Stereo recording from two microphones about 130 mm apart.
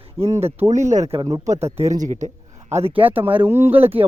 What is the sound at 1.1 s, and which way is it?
Speech, 45° right (ahead or behind).